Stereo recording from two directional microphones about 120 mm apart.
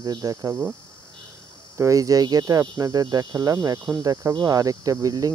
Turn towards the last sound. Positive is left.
turn(degrees=-30)  # may be behind; listen again after turning